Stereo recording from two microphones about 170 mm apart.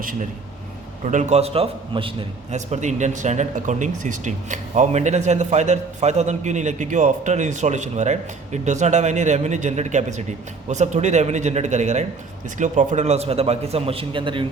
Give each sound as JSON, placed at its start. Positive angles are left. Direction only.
{"t": 1.0, "sound": "a man's voice", "side_deg": -40}
{"t": 2.6, "sound": "a man's voice", "side_deg": -45}